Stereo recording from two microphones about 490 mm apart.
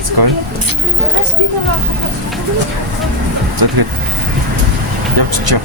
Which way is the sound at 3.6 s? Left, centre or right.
Right.